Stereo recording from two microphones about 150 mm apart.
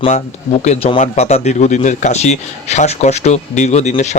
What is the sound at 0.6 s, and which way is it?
Speech, 50° left (ahead or behind).